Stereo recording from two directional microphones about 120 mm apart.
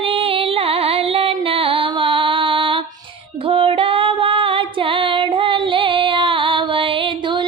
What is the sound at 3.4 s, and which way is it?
Music, 50° right (ahead or behind).